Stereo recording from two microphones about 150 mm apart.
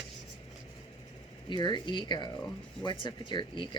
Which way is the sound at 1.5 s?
30° left (ahead or behind).